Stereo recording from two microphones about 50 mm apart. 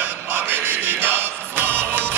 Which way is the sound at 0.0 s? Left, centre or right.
Right.